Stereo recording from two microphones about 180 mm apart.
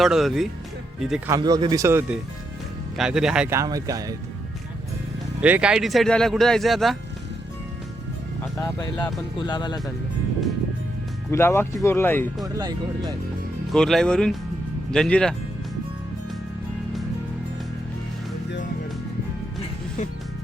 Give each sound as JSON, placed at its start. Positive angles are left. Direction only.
{"t": 0.0, "sound": "speech", "side_deg": 0}
{"t": 1.3, "sound": "a man's voice", "side_deg": -25}
{"t": 3.5, "sound": "a man's voice", "side_deg": -20}
{"t": 5.4, "sound": "speech", "side_deg": -5}
{"t": 8.5, "sound": "speech", "side_deg": 20}
{"t": 11.3, "sound": "speech", "side_deg": 15}
{"t": 12.5, "sound": "a man's voice", "side_deg": -20}
{"t": 13.7, "sound": "speech", "side_deg": 0}